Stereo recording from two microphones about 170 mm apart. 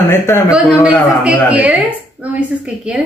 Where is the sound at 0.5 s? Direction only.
Centre (ahead or behind).